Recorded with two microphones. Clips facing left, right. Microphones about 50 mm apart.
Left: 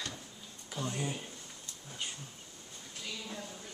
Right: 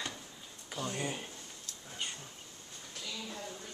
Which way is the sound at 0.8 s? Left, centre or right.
Centre.